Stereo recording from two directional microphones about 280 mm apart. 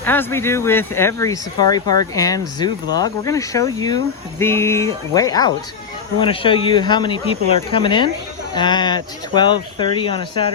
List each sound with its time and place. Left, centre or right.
0.0 s speech: centre